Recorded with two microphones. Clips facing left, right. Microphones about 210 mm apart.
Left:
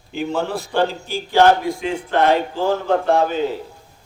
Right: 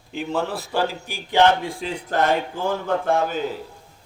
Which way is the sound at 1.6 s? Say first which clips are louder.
Left 6 dB; 35° right (ahead or behind).